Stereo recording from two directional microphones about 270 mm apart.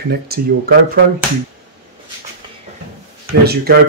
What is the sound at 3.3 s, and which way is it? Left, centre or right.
Speech, right.